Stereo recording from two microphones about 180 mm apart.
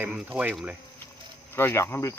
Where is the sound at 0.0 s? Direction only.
10° right (ahead or behind).